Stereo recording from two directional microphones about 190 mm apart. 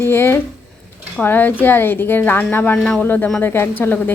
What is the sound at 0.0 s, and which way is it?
A woman's voice, 10° left (ahead or behind).